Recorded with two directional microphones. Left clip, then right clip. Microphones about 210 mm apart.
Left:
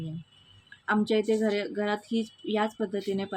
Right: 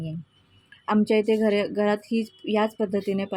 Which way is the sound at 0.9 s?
20° right (ahead or behind).